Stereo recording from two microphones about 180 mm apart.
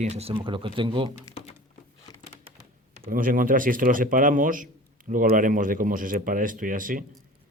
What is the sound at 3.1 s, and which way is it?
A man's voice, 50° right (ahead or behind).